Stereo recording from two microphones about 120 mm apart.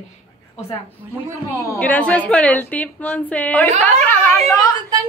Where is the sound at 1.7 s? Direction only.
10° left (ahead or behind).